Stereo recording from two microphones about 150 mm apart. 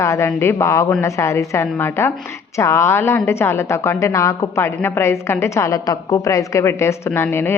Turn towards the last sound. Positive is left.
turn(degrees=15)  # may be behind; listen again after turning